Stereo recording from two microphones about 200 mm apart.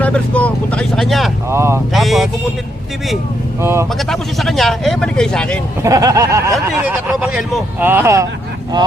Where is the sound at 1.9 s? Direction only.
Centre (ahead or behind).